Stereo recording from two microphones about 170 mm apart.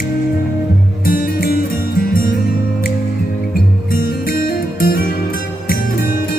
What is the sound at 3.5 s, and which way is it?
Music, 60° left (ahead or behind).